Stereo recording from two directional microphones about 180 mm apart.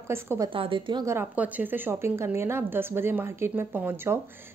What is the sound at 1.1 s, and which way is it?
Speech, 10° right (ahead or behind).